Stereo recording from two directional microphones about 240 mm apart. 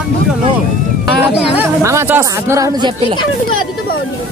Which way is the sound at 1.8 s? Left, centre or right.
Centre.